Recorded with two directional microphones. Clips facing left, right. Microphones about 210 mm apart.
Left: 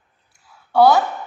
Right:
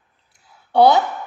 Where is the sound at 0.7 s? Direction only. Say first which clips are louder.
Even; 20° right (ahead or behind).